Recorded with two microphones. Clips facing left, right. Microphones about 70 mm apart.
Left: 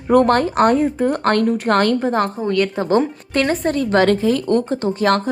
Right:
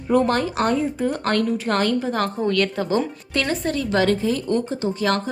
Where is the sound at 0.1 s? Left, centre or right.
Left.